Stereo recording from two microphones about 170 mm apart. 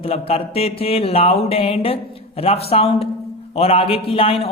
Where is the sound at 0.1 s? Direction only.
35° left (ahead or behind).